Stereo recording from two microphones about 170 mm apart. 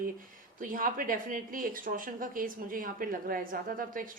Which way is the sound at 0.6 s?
55° right (ahead or behind).